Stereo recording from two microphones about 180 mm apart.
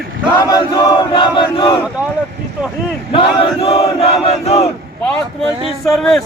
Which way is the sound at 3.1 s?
30° left (ahead or behind).